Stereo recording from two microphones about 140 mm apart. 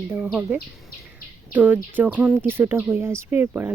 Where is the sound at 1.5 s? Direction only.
10° right (ahead or behind).